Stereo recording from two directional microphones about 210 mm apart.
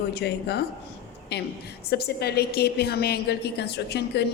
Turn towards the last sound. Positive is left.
turn(degrees=50)  # may be behind; listen again after turning